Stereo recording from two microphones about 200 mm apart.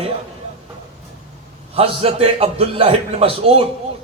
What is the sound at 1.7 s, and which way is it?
A man's voice, 30° right (ahead or behind).